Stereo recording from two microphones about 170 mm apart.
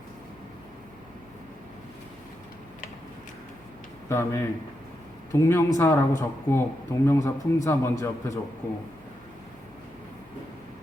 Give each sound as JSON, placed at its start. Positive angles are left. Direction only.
{"t": 4.1, "sound": "speech", "side_deg": 15}